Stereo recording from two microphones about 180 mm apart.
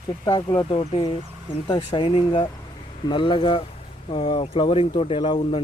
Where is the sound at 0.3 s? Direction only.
25° left (ahead or behind).